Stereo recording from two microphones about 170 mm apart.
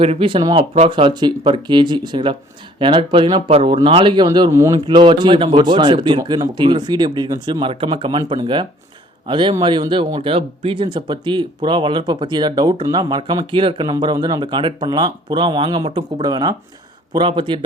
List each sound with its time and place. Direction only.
0.0 s speech: 30° right (ahead or behind)